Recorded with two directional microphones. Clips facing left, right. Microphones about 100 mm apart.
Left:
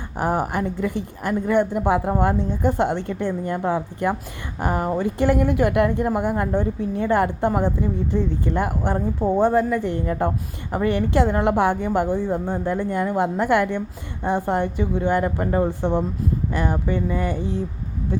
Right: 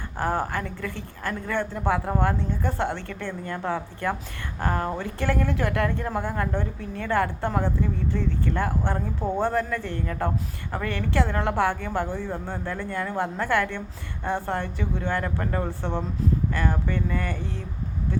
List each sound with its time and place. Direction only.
0.2 s a woman's voice: 15° left (ahead or behind)